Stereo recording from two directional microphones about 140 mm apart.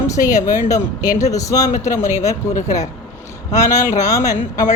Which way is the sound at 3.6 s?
20° left (ahead or behind).